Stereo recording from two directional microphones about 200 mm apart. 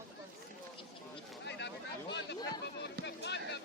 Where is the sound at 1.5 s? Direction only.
60° left (ahead or behind).